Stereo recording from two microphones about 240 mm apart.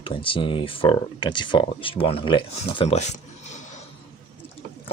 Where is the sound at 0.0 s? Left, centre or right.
Left.